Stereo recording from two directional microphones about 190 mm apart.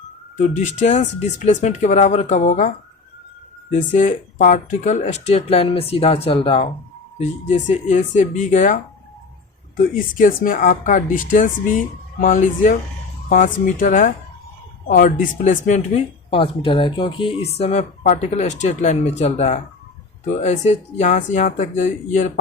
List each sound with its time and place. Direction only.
0.3 s speech: 40° left (ahead or behind)
7.2 s speech: 40° left (ahead or behind)